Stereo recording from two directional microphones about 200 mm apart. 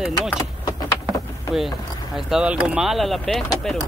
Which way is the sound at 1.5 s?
Centre (ahead or behind).